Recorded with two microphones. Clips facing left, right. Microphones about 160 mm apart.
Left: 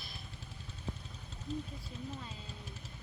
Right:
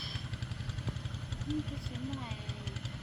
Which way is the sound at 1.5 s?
75° right (ahead or behind).